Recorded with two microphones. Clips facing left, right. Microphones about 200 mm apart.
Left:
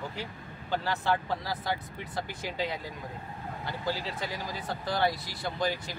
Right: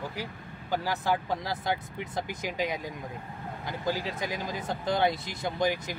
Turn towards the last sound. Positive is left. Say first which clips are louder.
# right 3 dB
turn(degrees=-15)  # may be behind; listen again after turning